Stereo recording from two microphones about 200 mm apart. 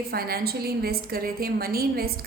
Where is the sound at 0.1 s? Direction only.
50° right (ahead or behind).